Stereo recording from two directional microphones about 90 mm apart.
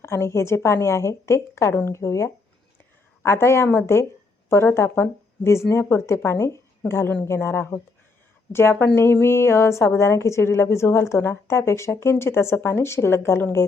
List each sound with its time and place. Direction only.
0.0 s a woman's voice: 30° left (ahead or behind)
9.2 s a woman's voice: 30° left (ahead or behind)